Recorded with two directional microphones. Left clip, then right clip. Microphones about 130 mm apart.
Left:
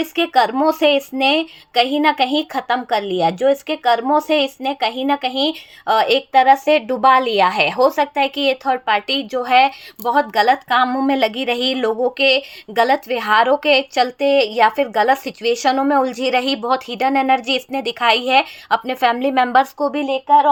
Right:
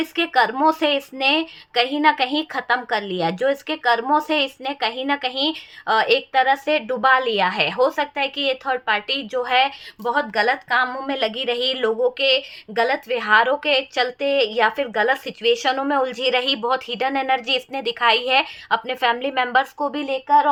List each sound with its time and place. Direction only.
0.0 s speech: 30° left (ahead or behind)